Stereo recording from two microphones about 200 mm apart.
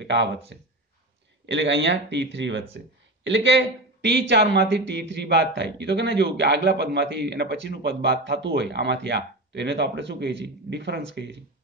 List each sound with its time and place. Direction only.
0.0 s speech: 60° right (ahead or behind)
1.4 s speech: 65° right (ahead or behind)